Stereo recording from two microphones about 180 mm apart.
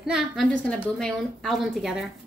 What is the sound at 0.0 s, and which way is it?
A woman's voice, centre (ahead or behind).